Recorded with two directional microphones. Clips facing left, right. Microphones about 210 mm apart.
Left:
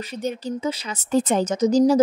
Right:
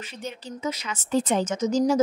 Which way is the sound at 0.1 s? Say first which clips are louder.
Left 11 dB; 40° left (ahead or behind).